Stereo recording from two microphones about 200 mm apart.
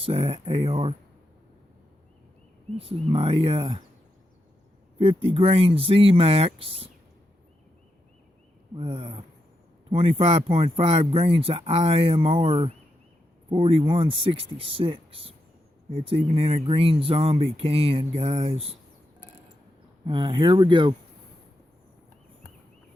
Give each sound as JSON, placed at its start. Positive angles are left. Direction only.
{"t": 0.0, "sound": "speech", "side_deg": -30}
{"t": 2.7, "sound": "speech", "side_deg": -30}
{"t": 4.9, "sound": "speech", "side_deg": -30}
{"t": 8.7, "sound": "speech", "side_deg": -25}
{"t": 20.1, "sound": "speech", "side_deg": -25}